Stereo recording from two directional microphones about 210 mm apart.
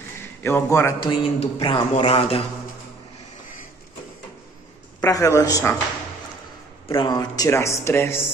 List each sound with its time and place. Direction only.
0.4 s a man's voice: 10° left (ahead or behind); by 2.4 s 30° left (ahead or behind)
5.0 s speech: 15° left (ahead or behind)
6.9 s speech: 20° left (ahead or behind)